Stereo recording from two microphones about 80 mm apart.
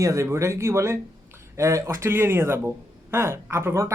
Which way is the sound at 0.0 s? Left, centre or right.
Right.